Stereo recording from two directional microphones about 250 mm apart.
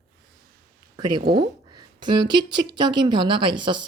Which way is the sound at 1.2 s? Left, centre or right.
Right.